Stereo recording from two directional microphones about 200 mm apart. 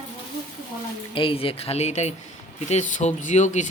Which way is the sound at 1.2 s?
25° left (ahead or behind).